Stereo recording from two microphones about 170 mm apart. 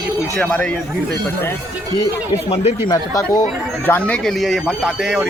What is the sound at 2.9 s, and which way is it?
Speech, 20° left (ahead or behind).